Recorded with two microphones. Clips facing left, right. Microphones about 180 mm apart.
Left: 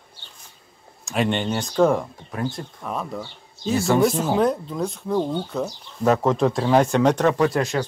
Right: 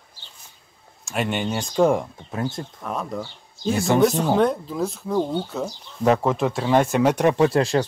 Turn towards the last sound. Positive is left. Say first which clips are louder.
# right 2 dB
turn(degrees=-30)  # may be behind; listen again after turning